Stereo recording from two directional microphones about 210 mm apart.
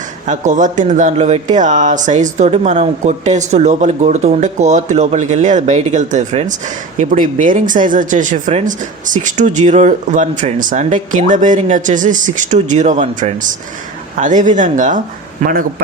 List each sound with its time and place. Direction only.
0.3 s speech: 35° right (ahead or behind)